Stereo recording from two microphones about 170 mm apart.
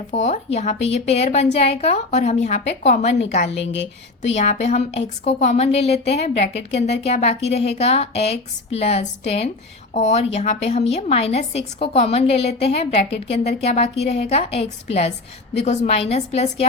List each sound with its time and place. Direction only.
0.1 s a woman's voice: 40° left (ahead or behind)
3.6 s speech: 90° left
4.4 s a woman's voice: 40° left (ahead or behind)